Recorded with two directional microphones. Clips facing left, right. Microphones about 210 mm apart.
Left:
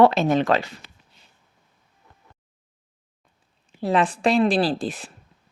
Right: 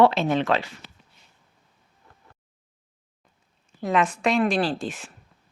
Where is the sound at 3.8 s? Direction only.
35° left (ahead or behind).